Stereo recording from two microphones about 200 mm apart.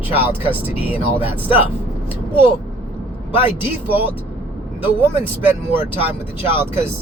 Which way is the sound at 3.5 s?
10° right (ahead or behind).